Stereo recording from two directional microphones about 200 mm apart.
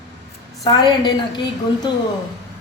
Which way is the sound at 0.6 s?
20° left (ahead or behind).